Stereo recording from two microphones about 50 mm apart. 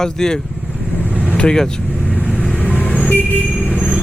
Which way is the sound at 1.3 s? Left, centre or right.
Left.